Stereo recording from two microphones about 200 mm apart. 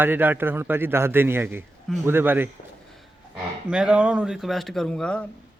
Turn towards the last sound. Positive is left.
turn(degrees=5)  # may be behind; listen again after turning